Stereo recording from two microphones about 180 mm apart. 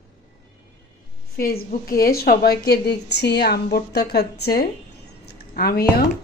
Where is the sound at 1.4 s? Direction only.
50° left (ahead or behind).